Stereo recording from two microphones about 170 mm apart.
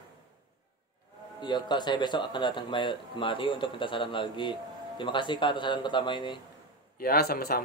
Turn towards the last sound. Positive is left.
turn(degrees=65)  # may be behind; listen again after turning